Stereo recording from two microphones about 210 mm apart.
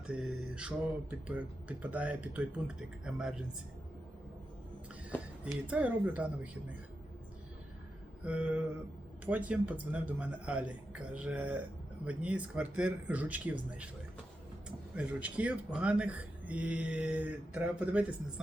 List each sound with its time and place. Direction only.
0.1 s speech: 5° right (ahead or behind)
5.6 s speech: 5° right (ahead or behind)
8.2 s speech: 5° right (ahead or behind)
14.9 s speech: 5° right (ahead or behind)